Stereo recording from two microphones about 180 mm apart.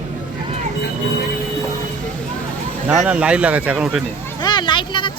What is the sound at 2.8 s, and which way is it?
Speech, 5° right (ahead or behind).